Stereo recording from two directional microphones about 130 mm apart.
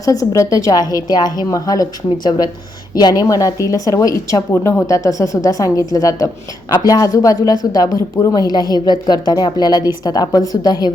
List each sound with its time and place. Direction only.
0.0 s speech: 25° left (ahead or behind)